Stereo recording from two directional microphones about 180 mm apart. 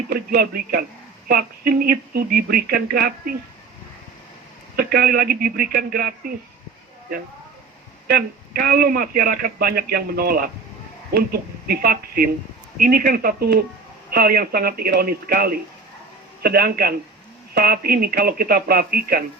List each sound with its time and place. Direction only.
0.1 s speech: 55° right (ahead or behind)
4.8 s speech: 55° right (ahead or behind)
8.0 s speech: 60° right (ahead or behind)